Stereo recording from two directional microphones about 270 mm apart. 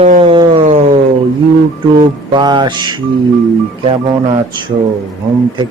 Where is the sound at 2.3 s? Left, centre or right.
Centre.